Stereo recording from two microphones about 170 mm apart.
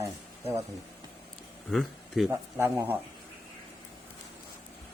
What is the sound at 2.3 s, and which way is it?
Speech, 15° right (ahead or behind).